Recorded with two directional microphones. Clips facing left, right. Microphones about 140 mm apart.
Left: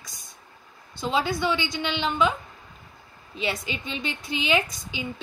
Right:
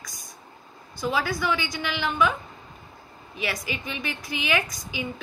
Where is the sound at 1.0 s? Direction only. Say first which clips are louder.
Left 1 dB; 25° left (ahead or behind).